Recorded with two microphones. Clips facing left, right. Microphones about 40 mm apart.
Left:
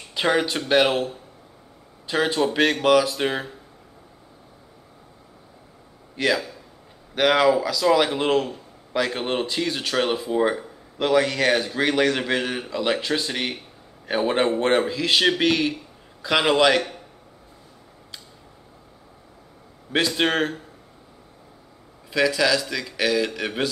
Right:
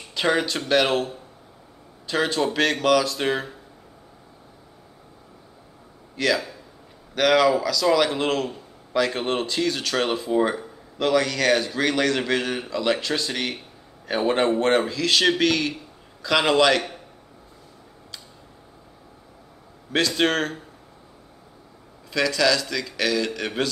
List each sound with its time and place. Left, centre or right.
0.1 s speech: centre
6.1 s a man's voice: centre
19.9 s speech: centre
22.1 s speech: centre